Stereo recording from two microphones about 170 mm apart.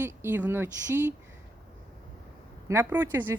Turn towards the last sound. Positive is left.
turn(degrees=-10)  # may be behind; listen again after turning